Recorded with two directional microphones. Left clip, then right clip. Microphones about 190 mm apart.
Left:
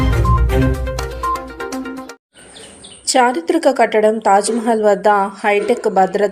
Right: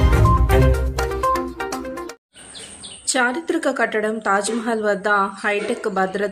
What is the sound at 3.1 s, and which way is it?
A woman's voice, 15° left (ahead or behind).